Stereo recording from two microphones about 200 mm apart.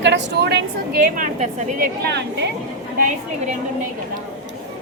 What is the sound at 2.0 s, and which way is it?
Speech, 55° right (ahead or behind).